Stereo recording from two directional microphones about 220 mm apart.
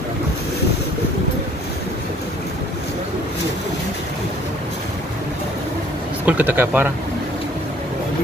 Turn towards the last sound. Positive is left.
turn(degrees=-10)  # may be behind; listen again after turning